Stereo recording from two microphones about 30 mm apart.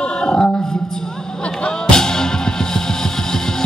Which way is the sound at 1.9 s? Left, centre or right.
Centre.